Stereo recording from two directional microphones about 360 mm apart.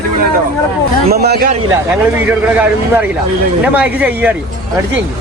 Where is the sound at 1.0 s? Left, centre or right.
Right.